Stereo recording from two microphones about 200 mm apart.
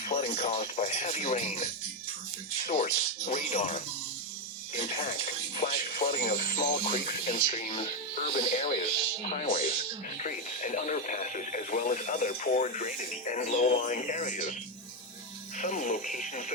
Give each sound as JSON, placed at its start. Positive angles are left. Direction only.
{"t": 0.0, "sound": "a sound", "side_deg": 45}
{"t": 0.3, "sound": "speech", "side_deg": 35}
{"t": 2.6, "sound": "speech", "side_deg": 40}
{"t": 15.5, "sound": "speech", "side_deg": 40}